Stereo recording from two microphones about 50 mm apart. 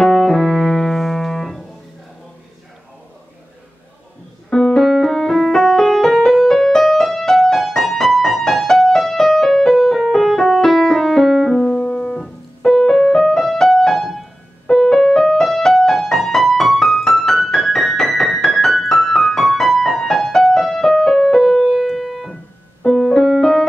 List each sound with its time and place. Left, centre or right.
0.0 s piano: centre
4.5 s music: centre
11.8 s keyboard: centre
12.2 s music: centre